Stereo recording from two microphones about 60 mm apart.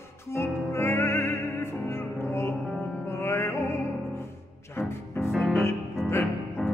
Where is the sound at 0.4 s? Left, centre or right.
Left.